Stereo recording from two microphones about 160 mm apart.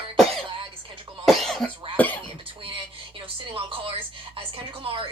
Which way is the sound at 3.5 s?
35° right (ahead or behind).